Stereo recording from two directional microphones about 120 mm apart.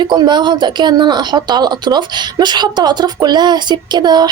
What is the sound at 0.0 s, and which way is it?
A woman's voice, 40° right (ahead or behind).